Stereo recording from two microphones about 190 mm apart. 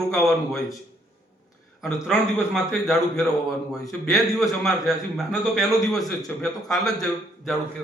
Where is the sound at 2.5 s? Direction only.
Centre (ahead or behind).